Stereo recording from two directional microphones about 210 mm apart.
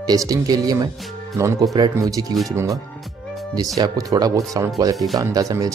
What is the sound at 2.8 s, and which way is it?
Music, centre (ahead or behind).